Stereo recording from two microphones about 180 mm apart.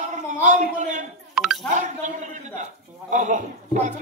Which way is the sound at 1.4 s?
Centre (ahead or behind).